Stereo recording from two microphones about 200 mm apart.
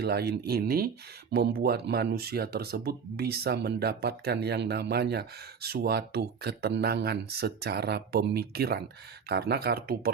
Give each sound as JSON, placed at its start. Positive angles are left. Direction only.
{"t": 0.0, "sound": "speech", "side_deg": -50}